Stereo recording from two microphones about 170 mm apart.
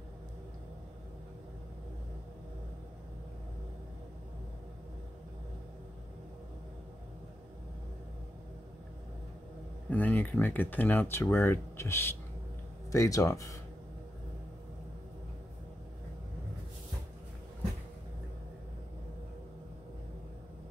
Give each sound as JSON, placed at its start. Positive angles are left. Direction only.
{"t": 9.8, "sound": "speech", "side_deg": 10}